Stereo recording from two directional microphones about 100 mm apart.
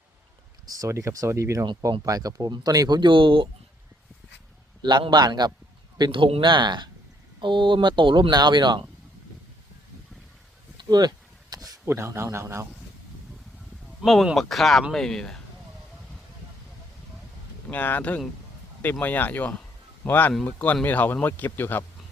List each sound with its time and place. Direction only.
0.7 s speech: 30° right (ahead or behind); by 3.5 s 55° right (ahead or behind)
4.8 s speech: 45° right (ahead or behind)
6.0 s speech: 55° right (ahead or behind)
10.8 s a sound: 45° right (ahead or behind)
11.9 s speech: 30° right (ahead or behind)
14.0 s speech: centre (ahead or behind)
17.7 s speech: 20° left (ahead or behind)